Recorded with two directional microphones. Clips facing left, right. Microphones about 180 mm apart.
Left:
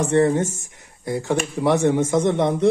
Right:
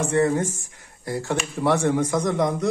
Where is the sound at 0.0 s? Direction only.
30° left (ahead or behind).